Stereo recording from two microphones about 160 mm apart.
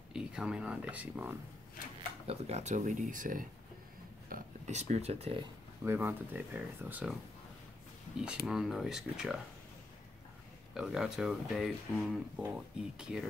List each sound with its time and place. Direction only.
0.1 s speech: 5° right (ahead or behind)
2.2 s speech: 45° right (ahead or behind)
5.9 s speech: 10° right (ahead or behind)
8.5 s speech: centre (ahead or behind)
10.7 s speech: 5° right (ahead or behind)